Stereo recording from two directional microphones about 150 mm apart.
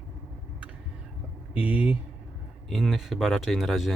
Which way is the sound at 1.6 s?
10° right (ahead or behind).